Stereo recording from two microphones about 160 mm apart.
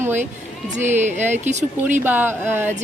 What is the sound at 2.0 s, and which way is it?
Speech, 10° right (ahead or behind).